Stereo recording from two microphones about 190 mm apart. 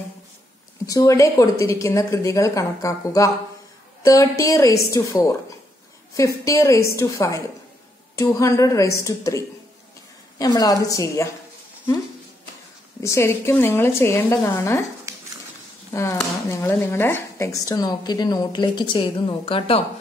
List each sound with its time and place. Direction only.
0.8 s a woman's voice: 15° left (ahead or behind)
10.4 s speech: 20° left (ahead or behind)
13.0 s a woman's voice: 15° left (ahead or behind)
15.9 s speech: 15° left (ahead or behind); by 19.8 s 30° left (ahead or behind)